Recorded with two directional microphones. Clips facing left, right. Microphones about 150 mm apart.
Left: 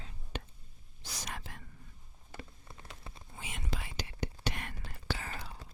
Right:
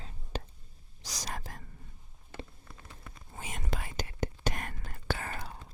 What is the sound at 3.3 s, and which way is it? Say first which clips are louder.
Whispering: right 3 dB; 45° right (ahead or behind).